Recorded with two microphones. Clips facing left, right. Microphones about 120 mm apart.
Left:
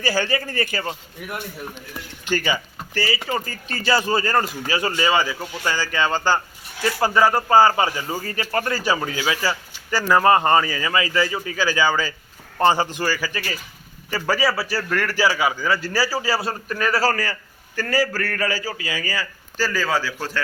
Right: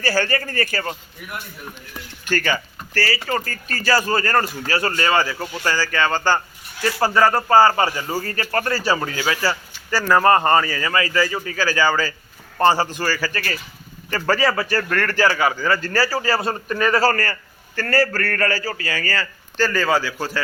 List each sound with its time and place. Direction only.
0.0 s speech: 15° left (ahead or behind)
2.2 s speech: 15° left (ahead or behind)
16.5 s speech: centre (ahead or behind)